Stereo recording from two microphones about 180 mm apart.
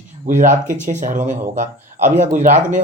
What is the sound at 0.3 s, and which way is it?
Speech, 45° right (ahead or behind).